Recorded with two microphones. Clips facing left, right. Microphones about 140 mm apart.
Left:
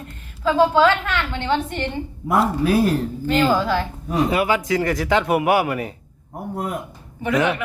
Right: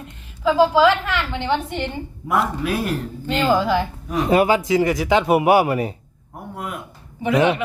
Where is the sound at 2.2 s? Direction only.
35° left (ahead or behind).